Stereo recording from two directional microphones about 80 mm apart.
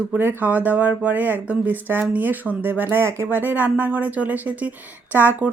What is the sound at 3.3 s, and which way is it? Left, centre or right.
Speech, right.